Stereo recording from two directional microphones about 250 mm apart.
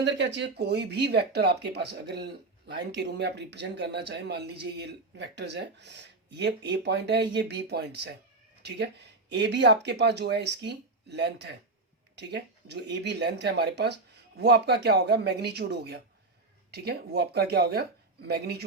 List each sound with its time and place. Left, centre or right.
0.0 s speech: right
9.3 s speech: right